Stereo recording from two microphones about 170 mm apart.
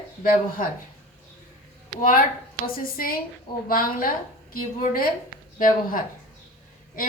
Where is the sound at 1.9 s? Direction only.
55° left (ahead or behind).